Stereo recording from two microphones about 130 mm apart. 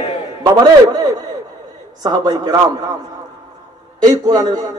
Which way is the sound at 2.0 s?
30° right (ahead or behind).